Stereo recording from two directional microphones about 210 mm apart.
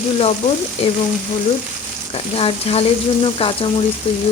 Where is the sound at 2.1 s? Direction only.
25° left (ahead or behind).